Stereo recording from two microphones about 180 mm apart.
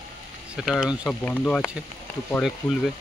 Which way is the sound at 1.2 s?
5° left (ahead or behind).